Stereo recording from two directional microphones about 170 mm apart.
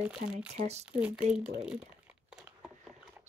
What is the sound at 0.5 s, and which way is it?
Speech, 40° right (ahead or behind).